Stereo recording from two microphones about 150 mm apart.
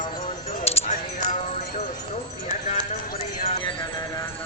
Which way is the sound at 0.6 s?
45° left (ahead or behind).